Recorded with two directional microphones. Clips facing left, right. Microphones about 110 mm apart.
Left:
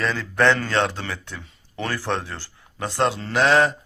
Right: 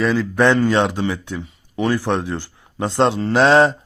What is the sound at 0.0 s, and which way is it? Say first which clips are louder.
Speech: right 4 dB; 10° right (ahead or behind).